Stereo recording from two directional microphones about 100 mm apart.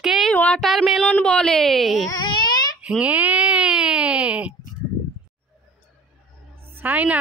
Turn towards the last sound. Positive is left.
turn(degrees=-15)  # may be behind; listen again after turning